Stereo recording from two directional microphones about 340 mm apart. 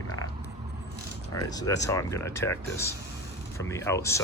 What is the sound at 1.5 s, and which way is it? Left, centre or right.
Speech, centre.